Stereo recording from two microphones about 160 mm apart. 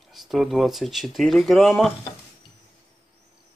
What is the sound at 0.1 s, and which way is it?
Speech, centre (ahead or behind).